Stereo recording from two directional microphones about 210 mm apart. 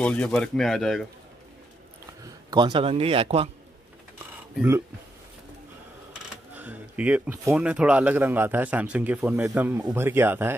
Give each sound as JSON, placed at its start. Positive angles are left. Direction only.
{"t": 0.0, "sound": "speech", "side_deg": 5}
{"t": 2.5, "sound": "speech", "side_deg": -20}
{"t": 4.6, "sound": "speech", "side_deg": -10}
{"t": 6.5, "sound": "speech", "side_deg": -10}